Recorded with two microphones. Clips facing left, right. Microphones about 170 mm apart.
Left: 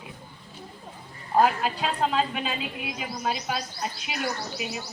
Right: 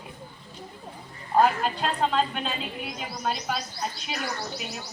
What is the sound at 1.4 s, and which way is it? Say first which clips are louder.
A woman's voice: even; 5° left (ahead or behind).